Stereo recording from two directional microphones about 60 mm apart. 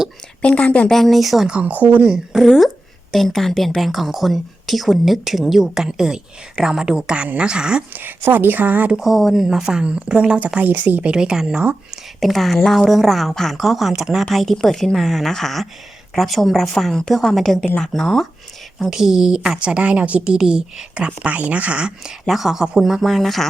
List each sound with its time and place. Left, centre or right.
0.4 s a woman's voice: left
0.9 s a woman's voice: centre
1.5 s speech: right
2.0 s a woman's voice: centre
2.4 s a woman's voice: centre
7.9 s a woman's voice: right
9.0 s a woman's voice: centre; by 11.1 s right
11.1 s a woman's voice: centre
12.2 s a woman's voice: centre
18.8 s a woman's voice: centre
22.3 s a woman's voice: centre